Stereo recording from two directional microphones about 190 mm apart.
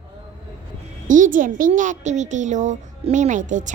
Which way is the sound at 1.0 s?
45° right (ahead or behind).